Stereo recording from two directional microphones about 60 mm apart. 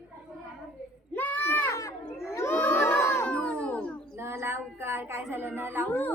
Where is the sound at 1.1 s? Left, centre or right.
Left.